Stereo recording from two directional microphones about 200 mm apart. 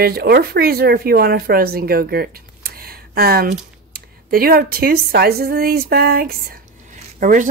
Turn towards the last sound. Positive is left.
turn(degrees=-40)  # may be behind; listen again after turning